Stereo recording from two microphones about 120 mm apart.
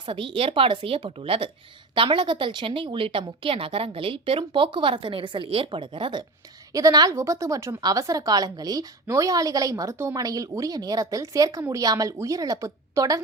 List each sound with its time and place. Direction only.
0.0 s a woman's voice: 45° right (ahead or behind)
6.7 s speech: 30° right (ahead or behind)